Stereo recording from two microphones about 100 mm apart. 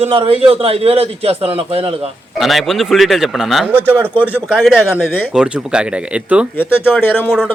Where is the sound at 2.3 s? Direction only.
Centre (ahead or behind).